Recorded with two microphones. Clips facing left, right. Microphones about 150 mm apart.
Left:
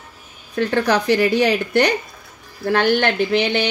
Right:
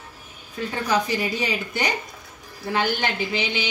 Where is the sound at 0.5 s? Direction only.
75° left (ahead or behind).